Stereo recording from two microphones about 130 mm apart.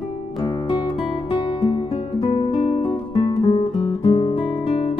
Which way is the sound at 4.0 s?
45° left (ahead or behind).